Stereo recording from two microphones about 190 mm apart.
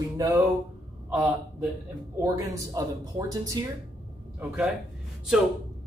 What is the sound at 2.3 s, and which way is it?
Speech, 20° right (ahead or behind).